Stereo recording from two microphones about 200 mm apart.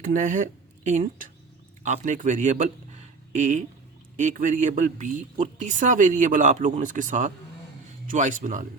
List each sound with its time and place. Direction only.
0.0 s a man's voice: 40° right (ahead or behind)